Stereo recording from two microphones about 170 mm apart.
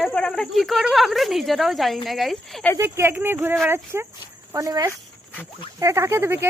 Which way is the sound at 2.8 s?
15° right (ahead or behind).